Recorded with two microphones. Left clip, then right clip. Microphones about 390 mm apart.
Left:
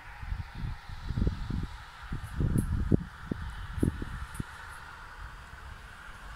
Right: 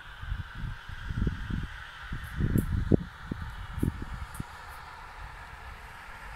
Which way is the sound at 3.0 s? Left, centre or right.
Centre.